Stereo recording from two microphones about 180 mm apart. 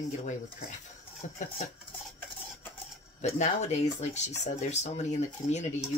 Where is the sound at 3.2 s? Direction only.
40° left (ahead or behind).